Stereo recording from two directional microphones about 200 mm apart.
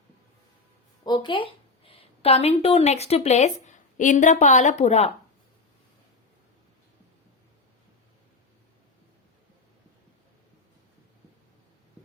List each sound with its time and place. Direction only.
1.0 s a woman's voice: 20° left (ahead or behind)